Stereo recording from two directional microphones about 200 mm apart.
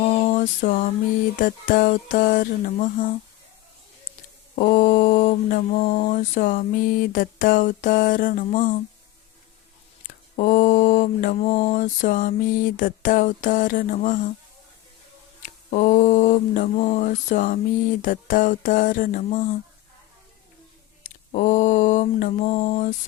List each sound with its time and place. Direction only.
0.0 s a sound: 35° left (ahead or behind)
4.5 s mantra: 40° left (ahead or behind)
10.3 s mantra: 40° left (ahead or behind)
15.4 s mantra: 40° left (ahead or behind)
21.0 s mantra: 40° left (ahead or behind)